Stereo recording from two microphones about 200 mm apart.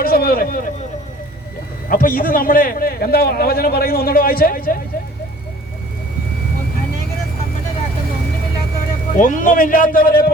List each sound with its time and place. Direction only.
0.0 s a sound: 50° left (ahead or behind)
1.9 s a man's voice: 45° left (ahead or behind)
9.1 s a man's voice: 40° left (ahead or behind)